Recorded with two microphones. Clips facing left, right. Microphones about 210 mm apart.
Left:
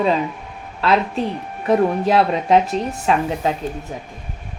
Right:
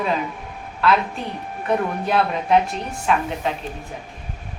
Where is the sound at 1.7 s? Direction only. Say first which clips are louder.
Left 6 dB; 35° left (ahead or behind).